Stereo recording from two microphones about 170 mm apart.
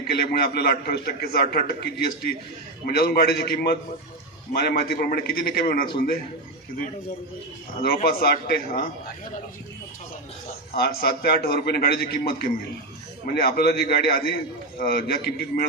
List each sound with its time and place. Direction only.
0.1 s a man's voice: 70° left (ahead or behind)
7.8 s a man's voice: 60° left (ahead or behind)
10.8 s a man's voice: 65° left (ahead or behind)